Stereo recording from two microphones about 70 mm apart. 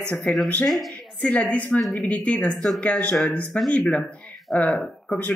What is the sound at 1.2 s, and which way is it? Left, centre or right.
Speech, left.